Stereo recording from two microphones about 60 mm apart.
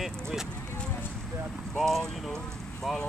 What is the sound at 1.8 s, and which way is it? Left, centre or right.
Speech, centre.